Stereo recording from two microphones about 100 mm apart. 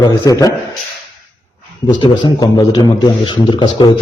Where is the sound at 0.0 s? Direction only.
35° left (ahead or behind).